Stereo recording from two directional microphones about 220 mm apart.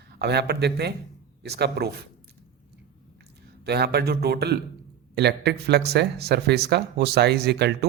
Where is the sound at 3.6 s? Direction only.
45° right (ahead or behind).